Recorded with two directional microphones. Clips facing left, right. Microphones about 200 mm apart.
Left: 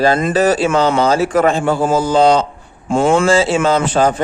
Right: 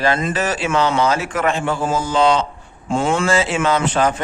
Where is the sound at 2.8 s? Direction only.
50° left (ahead or behind).